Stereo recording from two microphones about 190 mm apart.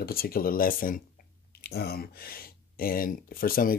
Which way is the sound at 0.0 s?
50° left (ahead or behind).